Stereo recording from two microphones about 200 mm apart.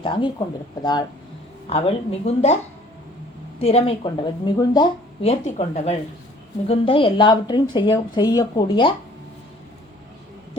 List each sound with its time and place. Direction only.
0.0 s speech: 20° left (ahead or behind)
3.6 s speech: 30° left (ahead or behind)